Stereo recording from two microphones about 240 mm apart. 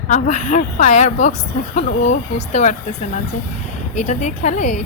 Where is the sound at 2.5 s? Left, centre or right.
Left.